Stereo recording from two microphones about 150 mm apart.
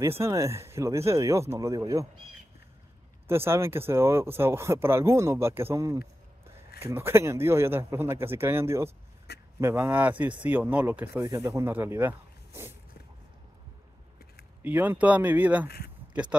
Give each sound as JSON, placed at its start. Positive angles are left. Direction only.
{"t": 0.0, "sound": "speech", "side_deg": -20}
{"t": 3.3, "sound": "speech", "side_deg": -15}
{"t": 11.1, "sound": "speech", "side_deg": -30}
{"t": 11.6, "sound": "speech", "side_deg": -15}
{"t": 14.6, "sound": "speech", "side_deg": -15}